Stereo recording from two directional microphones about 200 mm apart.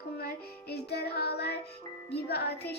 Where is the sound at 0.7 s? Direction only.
55° left (ahead or behind).